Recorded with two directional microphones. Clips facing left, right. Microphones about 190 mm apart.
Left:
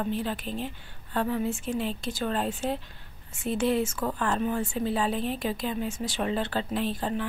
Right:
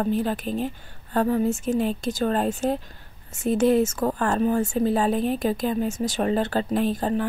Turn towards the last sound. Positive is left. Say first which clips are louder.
# right 6 dB
turn(degrees=-45)  # may be behind; listen again after turning